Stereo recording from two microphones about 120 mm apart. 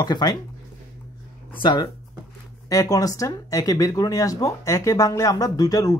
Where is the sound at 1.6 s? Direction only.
40° left (ahead or behind).